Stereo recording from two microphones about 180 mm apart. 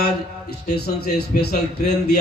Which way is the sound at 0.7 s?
60° left (ahead or behind).